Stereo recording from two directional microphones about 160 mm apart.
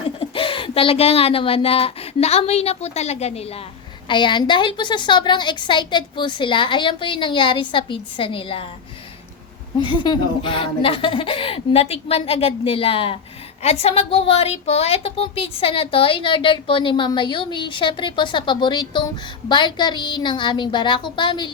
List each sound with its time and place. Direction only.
0.2 s a woman's voice: 35° left (ahead or behind)
4.1 s a woman's voice: 30° left (ahead or behind)
9.8 s a woman's voice: 30° left (ahead or behind)